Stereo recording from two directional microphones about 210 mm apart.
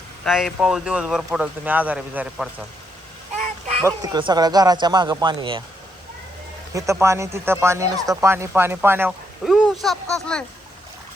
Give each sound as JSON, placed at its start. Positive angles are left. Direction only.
{"t": 0.3, "sound": "speech", "side_deg": 0}
{"t": 3.8, "sound": "speech", "side_deg": -20}
{"t": 7.0, "sound": "speech", "side_deg": -15}